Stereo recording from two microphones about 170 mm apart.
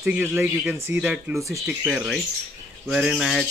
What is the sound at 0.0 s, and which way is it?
Speech, 10° right (ahead or behind).